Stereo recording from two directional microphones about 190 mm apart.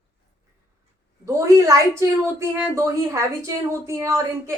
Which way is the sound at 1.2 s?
15° right (ahead or behind).